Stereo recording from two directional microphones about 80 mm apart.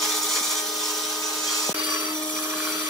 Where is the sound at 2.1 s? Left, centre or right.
Left.